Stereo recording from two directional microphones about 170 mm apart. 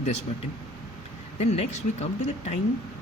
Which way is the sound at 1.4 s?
40° left (ahead or behind).